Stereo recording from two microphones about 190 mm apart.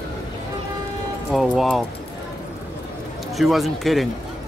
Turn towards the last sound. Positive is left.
turn(degrees=0)  # may be behind; listen again after turning